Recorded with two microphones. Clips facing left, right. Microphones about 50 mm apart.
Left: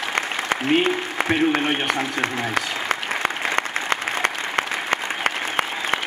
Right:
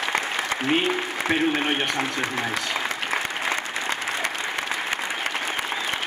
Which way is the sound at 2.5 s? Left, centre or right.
Left.